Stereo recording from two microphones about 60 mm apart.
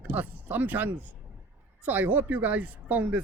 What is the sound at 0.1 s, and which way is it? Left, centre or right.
Speech, right.